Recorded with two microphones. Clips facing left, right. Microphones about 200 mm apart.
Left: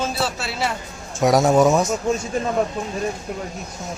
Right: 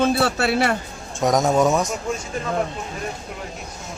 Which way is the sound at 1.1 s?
5° left (ahead or behind).